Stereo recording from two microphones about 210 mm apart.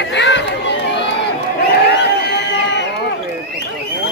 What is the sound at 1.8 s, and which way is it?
Music, 55° left (ahead or behind).